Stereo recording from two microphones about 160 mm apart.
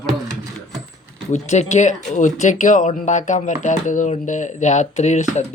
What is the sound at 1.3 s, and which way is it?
Speech, 45° left (ahead or behind).